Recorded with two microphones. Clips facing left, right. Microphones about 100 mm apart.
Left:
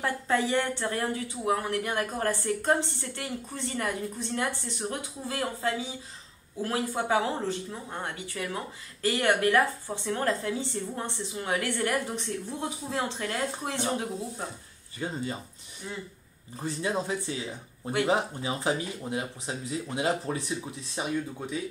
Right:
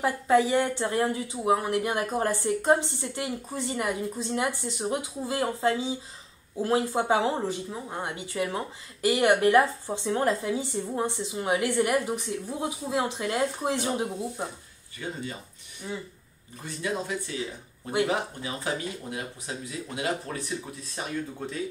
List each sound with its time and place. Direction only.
0.0 s speech: 10° right (ahead or behind)
15.0 s speech: 30° left (ahead or behind)
16.6 s speech: 30° left (ahead or behind)
21.4 s speech: 10° left (ahead or behind)